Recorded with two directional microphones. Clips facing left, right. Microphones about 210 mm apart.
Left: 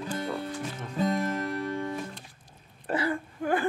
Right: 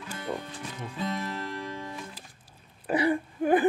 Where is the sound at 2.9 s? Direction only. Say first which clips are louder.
Right 4 dB; 20° right (ahead or behind).